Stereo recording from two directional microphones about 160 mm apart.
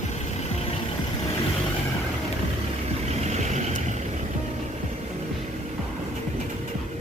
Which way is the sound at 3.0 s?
45° right (ahead or behind).